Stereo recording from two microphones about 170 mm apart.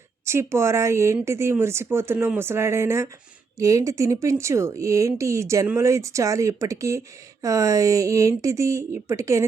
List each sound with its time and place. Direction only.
0.3 s a woman's voice: 15° right (ahead or behind)